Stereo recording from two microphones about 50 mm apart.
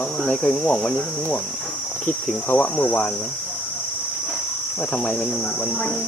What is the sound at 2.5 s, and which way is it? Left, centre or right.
Cricket, left.